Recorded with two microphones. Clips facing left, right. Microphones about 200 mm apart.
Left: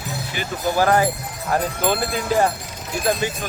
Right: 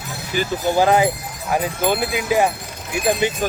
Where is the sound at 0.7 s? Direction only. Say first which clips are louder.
Right 2 dB; 20° right (ahead or behind).